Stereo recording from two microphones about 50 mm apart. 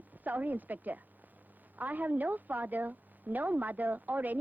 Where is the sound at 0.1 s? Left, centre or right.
Right.